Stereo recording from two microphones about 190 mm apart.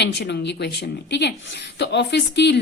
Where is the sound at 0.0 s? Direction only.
65° left (ahead or behind).